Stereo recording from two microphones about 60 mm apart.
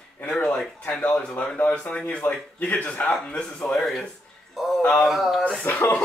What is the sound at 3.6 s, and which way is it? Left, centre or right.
Speech, centre.